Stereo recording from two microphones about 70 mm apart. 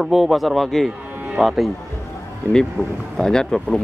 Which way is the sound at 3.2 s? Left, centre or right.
Centre.